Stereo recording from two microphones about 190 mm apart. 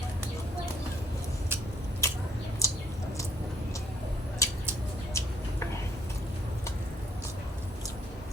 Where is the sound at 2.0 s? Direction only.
15° left (ahead or behind).